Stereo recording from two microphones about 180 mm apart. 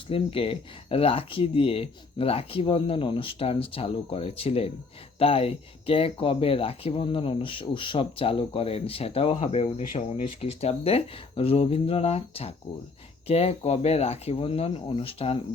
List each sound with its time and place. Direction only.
0.1 s speech: 30° left (ahead or behind)